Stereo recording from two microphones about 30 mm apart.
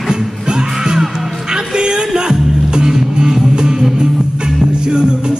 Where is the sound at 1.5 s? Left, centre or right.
Right.